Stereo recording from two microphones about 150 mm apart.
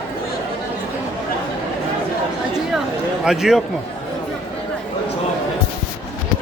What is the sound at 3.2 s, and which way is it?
Speech, 5° right (ahead or behind).